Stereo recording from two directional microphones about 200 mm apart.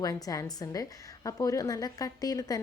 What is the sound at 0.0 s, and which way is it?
A woman's voice, 20° left (ahead or behind).